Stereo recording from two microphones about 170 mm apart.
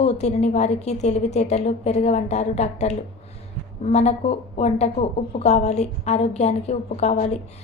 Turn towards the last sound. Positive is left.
turn(degrees=40)  # may be behind; listen again after turning